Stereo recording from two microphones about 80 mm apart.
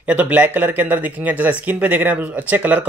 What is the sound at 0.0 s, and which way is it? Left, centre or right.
Speech, centre.